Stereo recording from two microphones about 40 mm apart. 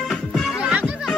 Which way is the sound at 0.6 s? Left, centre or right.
Right.